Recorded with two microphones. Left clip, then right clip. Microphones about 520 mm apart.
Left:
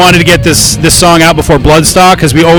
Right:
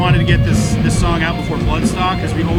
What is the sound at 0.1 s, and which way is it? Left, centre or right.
A man's voice, left.